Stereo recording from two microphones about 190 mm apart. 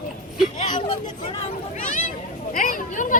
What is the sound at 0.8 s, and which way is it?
Vehicle, 25° left (ahead or behind).